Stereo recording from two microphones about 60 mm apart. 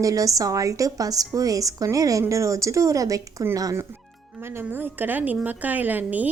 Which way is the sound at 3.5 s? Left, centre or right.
Right.